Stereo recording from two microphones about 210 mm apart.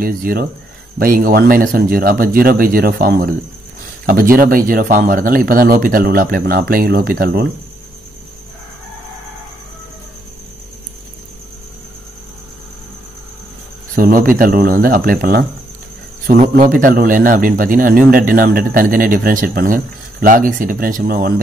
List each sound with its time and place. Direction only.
0.0 s a man's voice: 45° right (ahead or behind)
13.9 s a man's voice: 40° right (ahead or behind)